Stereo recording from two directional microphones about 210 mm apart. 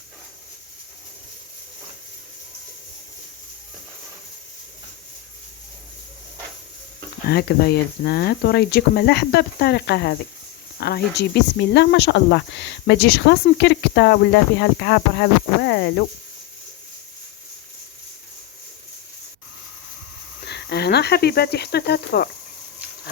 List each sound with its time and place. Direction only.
7.3 s speech: 50° left (ahead or behind)
20.4 s speech: 55° left (ahead or behind)